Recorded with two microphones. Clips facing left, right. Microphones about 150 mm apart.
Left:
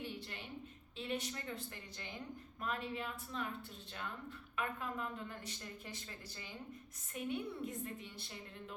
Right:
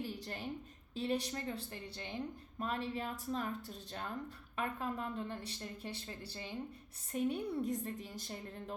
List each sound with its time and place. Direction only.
0.0 s a sound: 40° right (ahead or behind)
0.9 s speech: 35° right (ahead or behind)
4.5 s speech: 35° right (ahead or behind)